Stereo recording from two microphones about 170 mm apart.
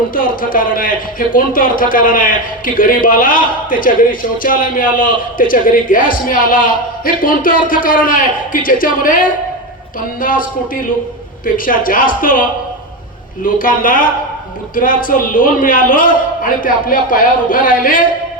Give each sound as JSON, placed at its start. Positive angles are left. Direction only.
{"t": 0.1, "sound": "speech", "side_deg": 55}